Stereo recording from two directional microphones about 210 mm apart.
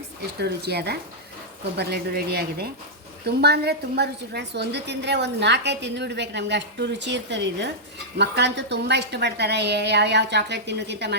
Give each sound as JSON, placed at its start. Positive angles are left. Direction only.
{"t": 0.3, "sound": "a woman's voice", "side_deg": -50}